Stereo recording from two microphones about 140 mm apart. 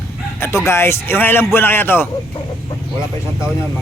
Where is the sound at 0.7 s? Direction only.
15° left (ahead or behind).